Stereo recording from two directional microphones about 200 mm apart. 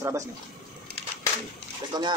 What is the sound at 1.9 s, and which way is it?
Speech, 20° right (ahead or behind).